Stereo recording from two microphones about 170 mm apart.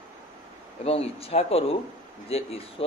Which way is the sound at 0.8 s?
35° left (ahead or behind).